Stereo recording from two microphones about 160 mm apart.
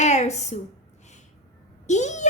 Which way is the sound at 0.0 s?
45° left (ahead or behind).